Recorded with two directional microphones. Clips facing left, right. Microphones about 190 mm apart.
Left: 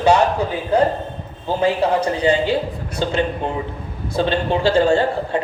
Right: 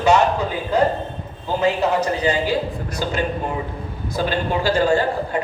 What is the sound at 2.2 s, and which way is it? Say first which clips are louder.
Speech: left 3 dB; 30° left (ahead or behind).